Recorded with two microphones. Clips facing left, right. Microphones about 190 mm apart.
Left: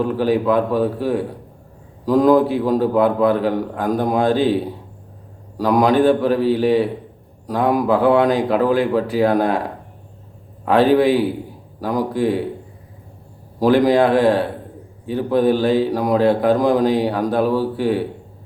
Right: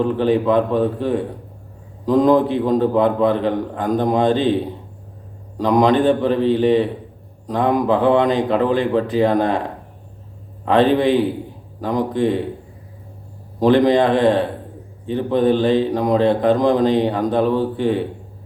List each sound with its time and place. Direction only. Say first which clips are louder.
0.0 s a man's voice: right 1 dB; 5° left (ahead or behind)
13.6 s a man's voice: even; 5° left (ahead or behind)